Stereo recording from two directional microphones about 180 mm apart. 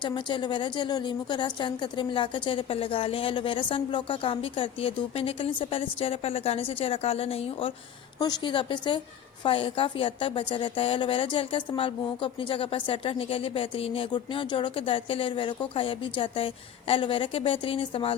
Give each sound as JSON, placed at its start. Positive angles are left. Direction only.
{"t": 0.0, "sound": "a woman's voice", "side_deg": 25}